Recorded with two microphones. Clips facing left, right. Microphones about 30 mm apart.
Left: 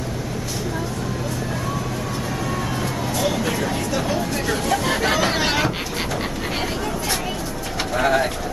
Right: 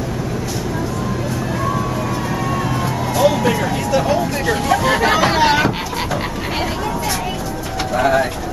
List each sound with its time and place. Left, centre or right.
3.2 s vehicle: centre
4.1 s speech: centre
7.9 s speech: centre